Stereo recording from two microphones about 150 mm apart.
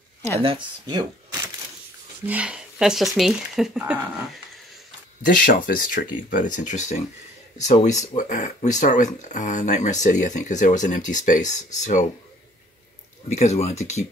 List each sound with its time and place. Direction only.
0.4 s speech: 35° right (ahead or behind)
2.2 s speech: 10° right (ahead or behind)
5.2 s speech: 65° left (ahead or behind)
13.3 s speech: 50° left (ahead or behind)